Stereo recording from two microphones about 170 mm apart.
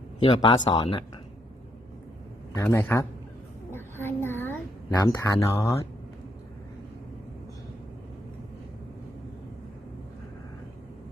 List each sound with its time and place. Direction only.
0.2 s speech: 25° left (ahead or behind)
2.6 s a man's voice: 15° left (ahead or behind)
3.7 s a sound: 15° left (ahead or behind)
4.9 s speech: 20° left (ahead or behind)